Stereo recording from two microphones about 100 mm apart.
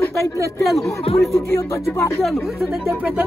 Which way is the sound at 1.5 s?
25° left (ahead or behind).